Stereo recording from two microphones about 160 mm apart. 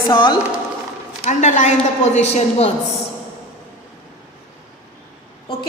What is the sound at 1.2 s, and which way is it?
A man's voice, 50° left (ahead or behind).